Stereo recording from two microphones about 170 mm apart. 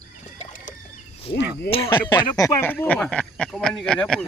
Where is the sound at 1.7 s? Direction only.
30° left (ahead or behind).